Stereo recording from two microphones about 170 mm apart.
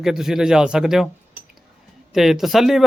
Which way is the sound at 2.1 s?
Centre (ahead or behind).